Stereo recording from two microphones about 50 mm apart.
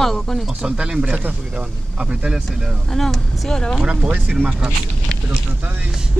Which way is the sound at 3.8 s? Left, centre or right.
Centre.